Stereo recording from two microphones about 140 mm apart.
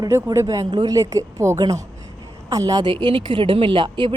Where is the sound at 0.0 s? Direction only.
25° right (ahead or behind).